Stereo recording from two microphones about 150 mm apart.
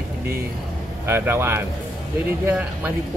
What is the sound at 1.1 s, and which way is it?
Speech, 15° right (ahead or behind).